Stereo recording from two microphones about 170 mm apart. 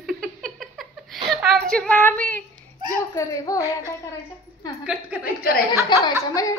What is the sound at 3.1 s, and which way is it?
Speech, 20° left (ahead or behind).